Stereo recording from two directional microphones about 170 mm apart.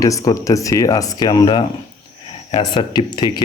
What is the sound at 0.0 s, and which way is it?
Speech, 20° left (ahead or behind).